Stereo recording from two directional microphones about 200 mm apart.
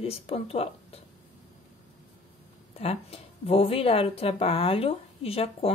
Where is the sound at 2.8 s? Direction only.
30° left (ahead or behind).